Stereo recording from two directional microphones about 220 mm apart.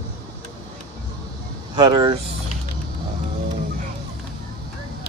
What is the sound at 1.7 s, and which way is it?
Speech, 20° right (ahead or behind).